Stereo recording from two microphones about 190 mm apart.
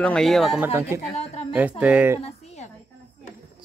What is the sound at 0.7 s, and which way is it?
Speech, 15° right (ahead or behind).